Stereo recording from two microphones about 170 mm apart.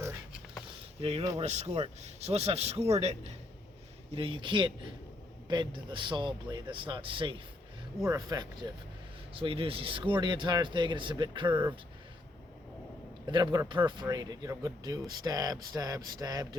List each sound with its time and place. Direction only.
1.4 s speech: 40° right (ahead or behind); by 8.4 s 20° right (ahead or behind)
9.3 s speech: 30° right (ahead or behind)
13.2 s speech: 25° right (ahead or behind)